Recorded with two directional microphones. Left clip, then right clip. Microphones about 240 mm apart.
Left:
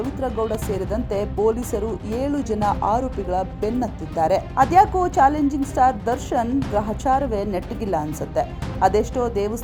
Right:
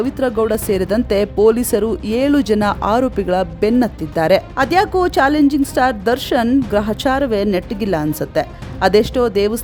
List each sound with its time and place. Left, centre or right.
0.2 s a woman's voice: right